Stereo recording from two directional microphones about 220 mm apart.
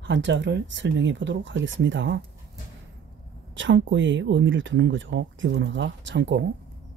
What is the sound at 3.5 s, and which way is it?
Speech, 60° right (ahead or behind).